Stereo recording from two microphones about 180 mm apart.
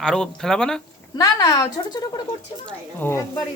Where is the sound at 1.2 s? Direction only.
20° left (ahead or behind).